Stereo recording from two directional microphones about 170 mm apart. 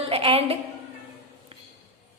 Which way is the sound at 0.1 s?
35° right (ahead or behind).